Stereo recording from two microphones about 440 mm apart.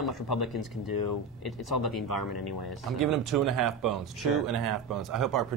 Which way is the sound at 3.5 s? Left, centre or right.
Right.